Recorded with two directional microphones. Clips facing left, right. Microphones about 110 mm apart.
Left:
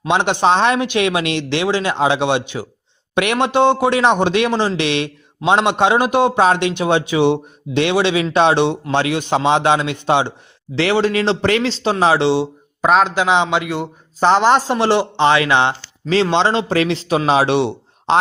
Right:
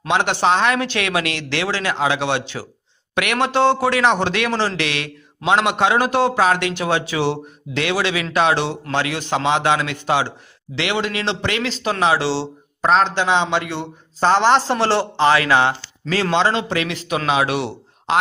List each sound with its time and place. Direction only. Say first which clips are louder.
0.1 s a man's voice: left 2 dB; 20° left (ahead or behind)
10.8 s speech: left 6 dB; 35° left (ahead or behind)
12.8 s a man's voice: left 2 dB; 5° left (ahead or behind); by 18.2 s 25° left (ahead or behind)